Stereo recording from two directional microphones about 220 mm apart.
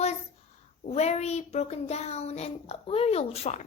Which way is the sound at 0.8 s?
30° left (ahead or behind).